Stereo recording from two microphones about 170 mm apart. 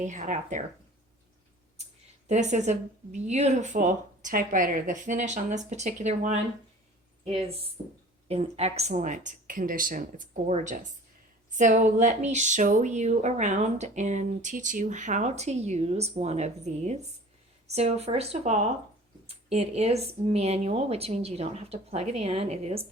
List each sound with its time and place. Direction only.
0.0 s speech: 45° right (ahead or behind)
2.2 s speech: 45° right (ahead or behind)
8.3 s a woman's voice: 35° right (ahead or behind)